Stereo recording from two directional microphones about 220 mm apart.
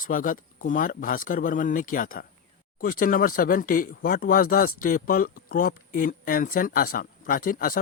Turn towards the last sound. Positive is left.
turn(degrees=40)  # may be behind; listen again after turning